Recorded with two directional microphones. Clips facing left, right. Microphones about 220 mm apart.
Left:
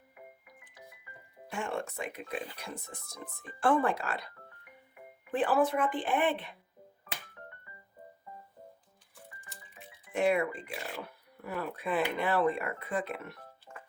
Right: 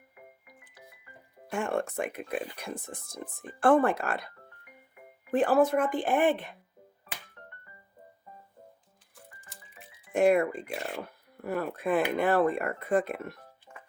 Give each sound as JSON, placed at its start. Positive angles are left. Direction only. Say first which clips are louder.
{"t": 1.5, "sound": "speech", "louder": "right 6 dB", "side_deg": -50}
{"t": 3.6, "sound": "speech", "louder": "right 5 dB", "side_deg": -55}
{"t": 5.3, "sound": "speech", "louder": "right 4 dB", "side_deg": -45}
{"t": 9.5, "sound": "music", "louder": "left 1 dB", "side_deg": 0}
{"t": 10.1, "sound": "speech", "louder": "right 5 dB", "side_deg": -45}
{"t": 10.7, "sound": "speech", "louder": "right 5 dB", "side_deg": 0}
{"t": 11.4, "sound": "speech", "louder": "right 5 dB", "side_deg": -45}